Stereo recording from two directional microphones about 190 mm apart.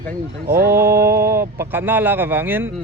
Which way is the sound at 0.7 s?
15° right (ahead or behind).